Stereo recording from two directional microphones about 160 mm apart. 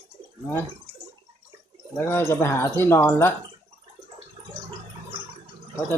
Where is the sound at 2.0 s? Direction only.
15° left (ahead or behind).